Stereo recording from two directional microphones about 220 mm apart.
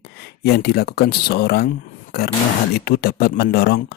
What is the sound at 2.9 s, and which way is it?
Speech, 45° left (ahead or behind).